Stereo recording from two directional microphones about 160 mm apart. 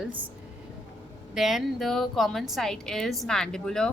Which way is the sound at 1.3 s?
Centre (ahead or behind).